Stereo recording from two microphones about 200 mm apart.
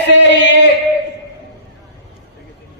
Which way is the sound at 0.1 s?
60° left (ahead or behind).